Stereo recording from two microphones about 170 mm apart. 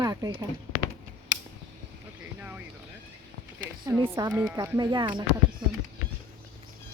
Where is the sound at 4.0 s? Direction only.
25° right (ahead or behind).